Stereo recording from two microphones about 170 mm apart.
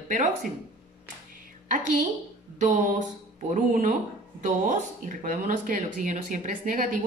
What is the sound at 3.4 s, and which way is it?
Speech, 50° right (ahead or behind).